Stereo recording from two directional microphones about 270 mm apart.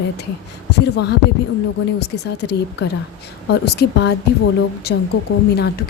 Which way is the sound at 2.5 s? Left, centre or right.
Left.